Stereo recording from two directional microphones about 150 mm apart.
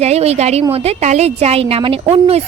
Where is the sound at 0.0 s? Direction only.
45° right (ahead or behind).